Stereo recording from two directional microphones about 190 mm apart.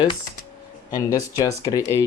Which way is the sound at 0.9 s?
15° left (ahead or behind).